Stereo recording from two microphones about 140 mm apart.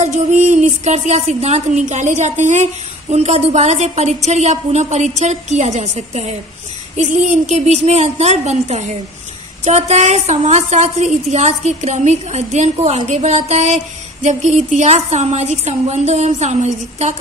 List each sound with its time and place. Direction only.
0.0 s a woman's voice: 55° right (ahead or behind)